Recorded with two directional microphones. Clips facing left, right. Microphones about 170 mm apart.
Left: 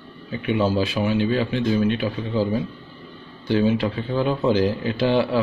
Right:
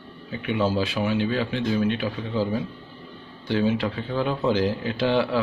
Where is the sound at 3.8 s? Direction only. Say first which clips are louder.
Left 3 dB; 5° left (ahead or behind).